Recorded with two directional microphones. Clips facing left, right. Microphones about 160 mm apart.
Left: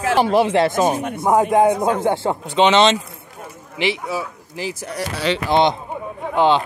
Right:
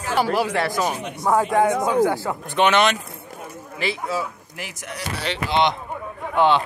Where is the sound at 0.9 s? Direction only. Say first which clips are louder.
Left 7 dB; 50° left (ahead or behind).